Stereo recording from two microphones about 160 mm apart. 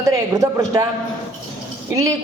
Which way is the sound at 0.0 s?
20° right (ahead or behind).